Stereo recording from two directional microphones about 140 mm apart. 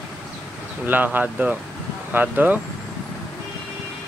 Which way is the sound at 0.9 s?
10° right (ahead or behind).